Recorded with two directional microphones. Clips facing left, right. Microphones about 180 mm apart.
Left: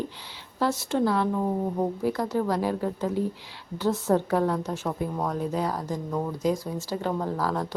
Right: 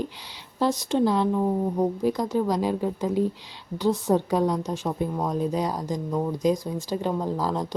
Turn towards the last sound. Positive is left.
turn(degrees=-15)  # may be behind; listen again after turning